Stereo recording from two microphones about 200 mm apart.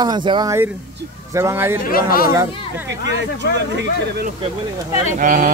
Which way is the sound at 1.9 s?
50° left (ahead or behind).